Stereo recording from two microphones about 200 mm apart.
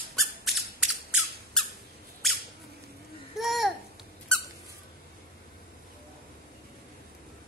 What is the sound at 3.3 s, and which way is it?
Babbling, centre (ahead or behind).